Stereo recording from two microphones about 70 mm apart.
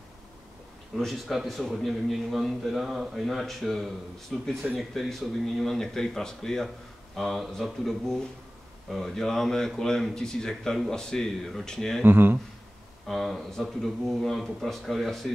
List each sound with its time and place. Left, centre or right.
0.9 s a man's voice: centre
12.0 s speech: right
13.0 s a man's voice: centre